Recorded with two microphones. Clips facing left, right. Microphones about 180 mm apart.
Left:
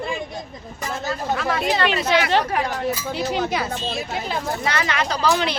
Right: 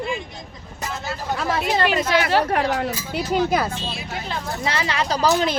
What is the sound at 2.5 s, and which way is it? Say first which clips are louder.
Speech: right 3 dB; 65° right (ahead or behind).